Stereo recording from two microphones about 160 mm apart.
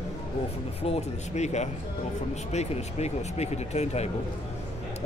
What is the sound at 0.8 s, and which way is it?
Speech, 40° left (ahead or behind).